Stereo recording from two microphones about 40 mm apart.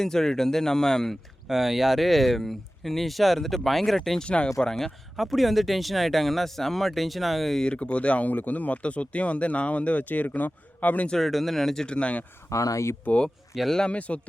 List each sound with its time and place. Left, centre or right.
0.0 s speech: centre
1.5 s speech: centre
4.2 s speech: left
4.8 s speech: centre
7.6 s speech: left
11.2 s speech: centre
11.9 s speech: left
13.1 s speech: left